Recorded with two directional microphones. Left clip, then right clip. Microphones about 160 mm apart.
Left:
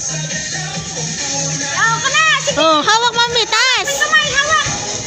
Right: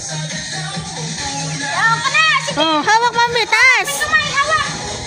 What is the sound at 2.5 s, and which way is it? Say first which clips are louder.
Speech: left 2 dB; 15° right (ahead or behind).